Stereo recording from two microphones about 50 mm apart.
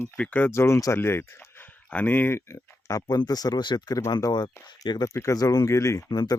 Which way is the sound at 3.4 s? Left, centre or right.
Left.